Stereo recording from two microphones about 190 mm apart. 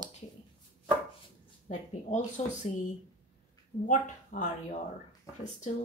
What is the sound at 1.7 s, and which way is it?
Speech, 40° left (ahead or behind).